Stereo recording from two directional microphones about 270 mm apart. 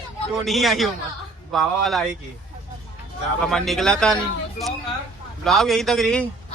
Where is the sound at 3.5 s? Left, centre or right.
Centre.